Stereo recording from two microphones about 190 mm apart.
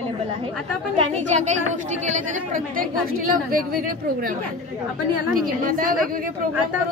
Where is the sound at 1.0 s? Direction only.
35° right (ahead or behind).